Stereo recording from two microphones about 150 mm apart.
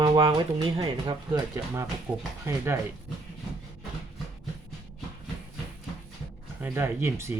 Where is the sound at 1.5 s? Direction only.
20° right (ahead or behind).